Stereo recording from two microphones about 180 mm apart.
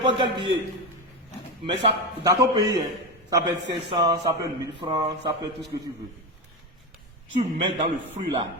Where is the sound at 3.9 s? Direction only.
25° right (ahead or behind).